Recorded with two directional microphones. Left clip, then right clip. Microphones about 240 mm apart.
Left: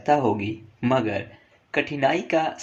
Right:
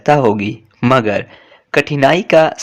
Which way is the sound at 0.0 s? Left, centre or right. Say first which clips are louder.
Right 9 dB; right.